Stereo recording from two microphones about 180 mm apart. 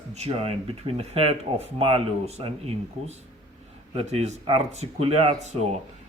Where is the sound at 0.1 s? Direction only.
35° right (ahead or behind).